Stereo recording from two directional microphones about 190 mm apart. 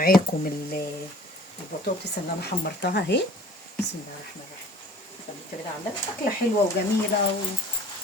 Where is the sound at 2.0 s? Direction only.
60° left (ahead or behind).